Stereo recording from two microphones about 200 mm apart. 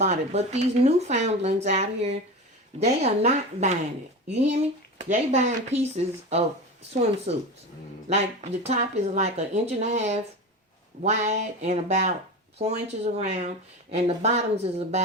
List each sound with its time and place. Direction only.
0.0 s speech: 35° right (ahead or behind)
13.1 s speech: 35° right (ahead or behind)